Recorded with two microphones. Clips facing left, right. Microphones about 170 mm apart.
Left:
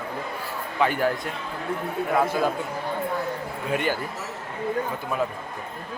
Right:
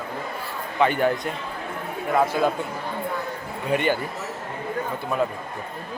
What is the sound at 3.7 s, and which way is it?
Speech, 5° left (ahead or behind).